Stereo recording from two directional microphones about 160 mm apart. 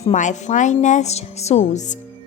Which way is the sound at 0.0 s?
50° left (ahead or behind).